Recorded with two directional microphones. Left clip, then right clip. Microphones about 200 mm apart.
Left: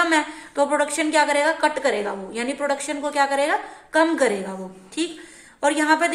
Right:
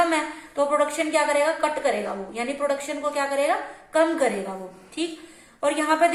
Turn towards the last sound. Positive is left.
turn(degrees=50)  # may be behind; listen again after turning